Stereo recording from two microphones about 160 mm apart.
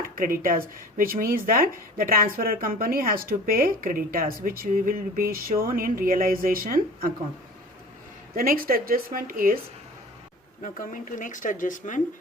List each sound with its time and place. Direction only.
0.2 s a woman's voice: 60° right (ahead or behind)
8.4 s a woman's voice: 65° right (ahead or behind)
10.6 s speech: 55° left (ahead or behind)